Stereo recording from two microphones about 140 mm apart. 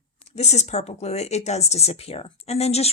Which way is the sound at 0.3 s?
50° left (ahead or behind).